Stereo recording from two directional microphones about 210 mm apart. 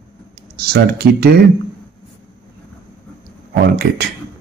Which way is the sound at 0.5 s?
45° right (ahead or behind).